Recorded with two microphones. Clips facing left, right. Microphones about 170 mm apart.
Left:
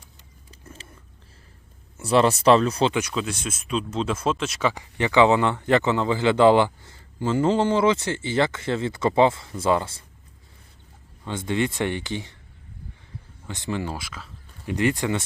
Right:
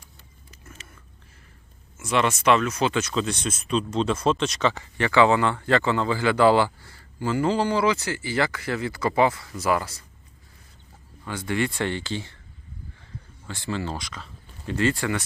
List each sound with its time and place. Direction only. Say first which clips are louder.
0.6 s biting: left 3 dB; 30° left (ahead or behind)
2.0 s speech: left 4 dB; 35° left (ahead or behind)
2.9 s speech: right 1 dB; 10° left (ahead or behind)
11.3 s speech: left 1 dB; 20° left (ahead or behind)
13.5 s speech: left 1 dB; 20° left (ahead or behind)
14.7 s speech: left 1 dB; 15° left (ahead or behind)